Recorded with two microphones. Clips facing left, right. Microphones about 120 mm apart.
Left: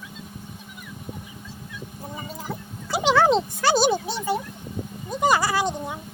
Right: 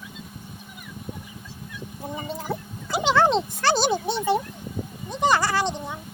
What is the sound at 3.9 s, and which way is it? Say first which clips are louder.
Speech: right 2 dB; 25° right (ahead or behind).